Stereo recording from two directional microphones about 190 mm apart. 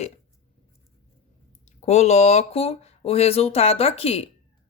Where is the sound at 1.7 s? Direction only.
35° left (ahead or behind).